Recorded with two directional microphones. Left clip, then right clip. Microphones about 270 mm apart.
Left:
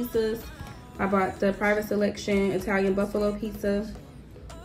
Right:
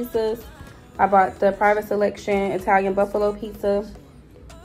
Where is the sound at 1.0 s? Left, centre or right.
Right.